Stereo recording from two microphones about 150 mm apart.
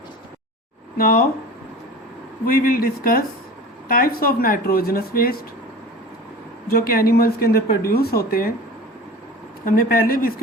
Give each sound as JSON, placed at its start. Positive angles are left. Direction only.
{"t": 0.9, "sound": "speech", "side_deg": 75}
{"t": 2.5, "sound": "speech", "side_deg": 80}
{"t": 6.7, "sound": "speech", "side_deg": 80}
{"t": 9.6, "sound": "speech", "side_deg": 75}